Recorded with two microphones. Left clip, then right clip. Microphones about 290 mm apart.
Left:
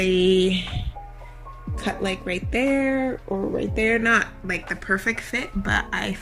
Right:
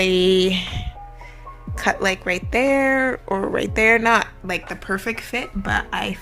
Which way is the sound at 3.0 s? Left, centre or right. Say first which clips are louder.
Right 4 dB; right.